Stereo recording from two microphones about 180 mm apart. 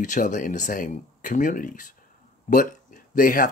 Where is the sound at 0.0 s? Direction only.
45° left (ahead or behind).